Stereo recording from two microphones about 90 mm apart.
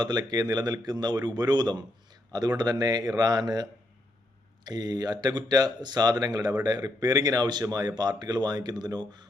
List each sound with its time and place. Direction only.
0.0 s speech: 50° right (ahead or behind)